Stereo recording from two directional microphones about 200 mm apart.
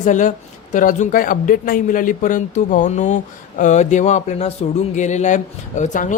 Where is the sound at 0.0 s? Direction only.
40° left (ahead or behind).